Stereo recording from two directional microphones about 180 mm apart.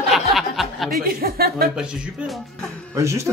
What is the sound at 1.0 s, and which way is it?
Speech, 55° right (ahead or behind).